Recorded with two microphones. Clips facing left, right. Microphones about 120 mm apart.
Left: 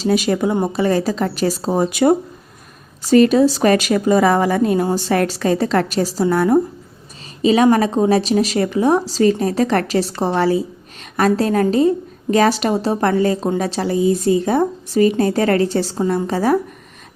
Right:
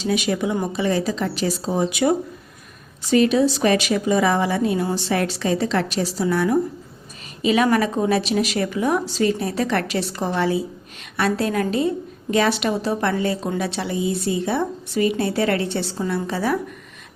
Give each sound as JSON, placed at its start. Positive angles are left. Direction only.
{"t": 0.0, "sound": "a woman's voice", "side_deg": 40}
{"t": 0.5, "sound": "a woman's voice", "side_deg": 30}
{"t": 0.8, "sound": "a woman's voice", "side_deg": 45}